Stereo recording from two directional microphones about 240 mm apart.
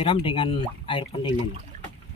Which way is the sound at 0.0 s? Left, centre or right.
Left.